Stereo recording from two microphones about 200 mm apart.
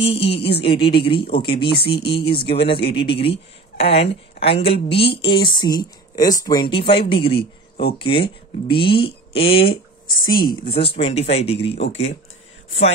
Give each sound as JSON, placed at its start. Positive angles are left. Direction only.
{"t": 0.1, "sound": "speech", "side_deg": 30}
{"t": 2.3, "sound": "speech", "side_deg": 55}
{"t": 2.9, "sound": "speech", "side_deg": 25}
{"t": 10.0, "sound": "speech", "side_deg": 45}
{"t": 10.4, "sound": "speech", "side_deg": 25}